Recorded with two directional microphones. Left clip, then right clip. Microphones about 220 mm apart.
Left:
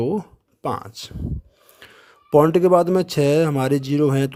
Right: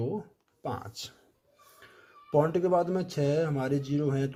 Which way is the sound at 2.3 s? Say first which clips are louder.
Left 11 dB; 40° left (ahead or behind).